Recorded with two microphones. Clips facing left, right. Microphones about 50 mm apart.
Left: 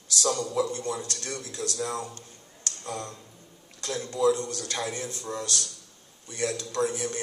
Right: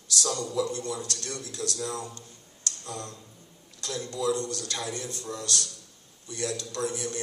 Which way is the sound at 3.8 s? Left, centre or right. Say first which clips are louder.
Left 5 dB; left.